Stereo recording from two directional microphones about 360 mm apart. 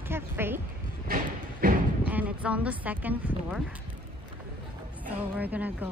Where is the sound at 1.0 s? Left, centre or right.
Right.